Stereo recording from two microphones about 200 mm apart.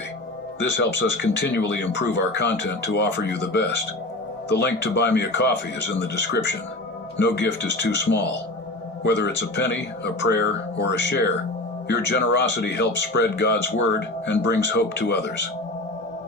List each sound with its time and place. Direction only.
0.6 s speech: 60° left (ahead or behind)